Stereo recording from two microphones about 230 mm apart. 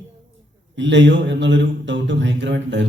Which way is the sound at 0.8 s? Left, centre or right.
Right.